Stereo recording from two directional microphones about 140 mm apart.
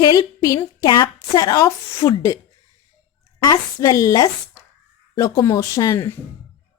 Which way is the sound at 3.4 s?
25° left (ahead or behind).